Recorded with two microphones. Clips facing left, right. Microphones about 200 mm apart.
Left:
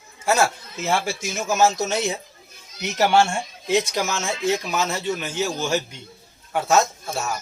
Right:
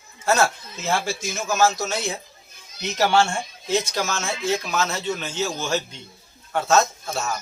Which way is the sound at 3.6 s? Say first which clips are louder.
Left 2 dB; 15° left (ahead or behind).